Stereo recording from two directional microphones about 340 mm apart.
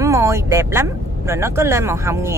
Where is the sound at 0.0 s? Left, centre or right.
Centre.